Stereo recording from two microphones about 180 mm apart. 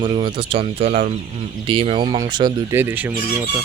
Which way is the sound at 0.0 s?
30° right (ahead or behind).